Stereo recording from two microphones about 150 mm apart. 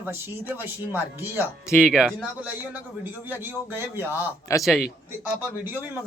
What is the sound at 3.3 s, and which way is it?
Speech, 15° right (ahead or behind).